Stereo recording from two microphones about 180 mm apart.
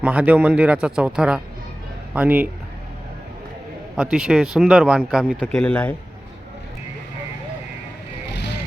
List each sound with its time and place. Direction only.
0.0 s speech: 10° right (ahead or behind)
3.9 s speech: 5° right (ahead or behind)
8.3 s vehicle: 70° left (ahead or behind)